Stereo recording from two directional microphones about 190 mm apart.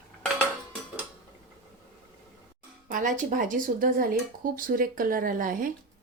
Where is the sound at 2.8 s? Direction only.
45° right (ahead or behind).